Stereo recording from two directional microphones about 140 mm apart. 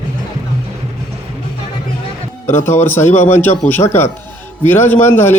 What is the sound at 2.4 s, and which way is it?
A man's voice, 15° left (ahead or behind).